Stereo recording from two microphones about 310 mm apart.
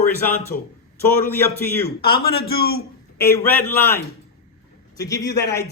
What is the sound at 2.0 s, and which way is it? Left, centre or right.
A man's voice, left.